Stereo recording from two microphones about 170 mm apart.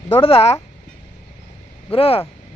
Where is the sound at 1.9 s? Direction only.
35° left (ahead or behind).